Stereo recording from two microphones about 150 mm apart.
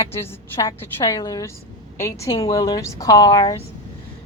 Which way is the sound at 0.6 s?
20° left (ahead or behind).